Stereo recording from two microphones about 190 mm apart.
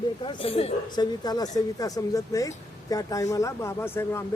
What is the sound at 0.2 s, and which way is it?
A woman's voice, 30° left (ahead or behind).